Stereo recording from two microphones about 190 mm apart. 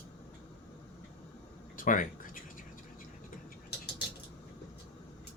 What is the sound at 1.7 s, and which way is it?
Speech, 45° left (ahead or behind).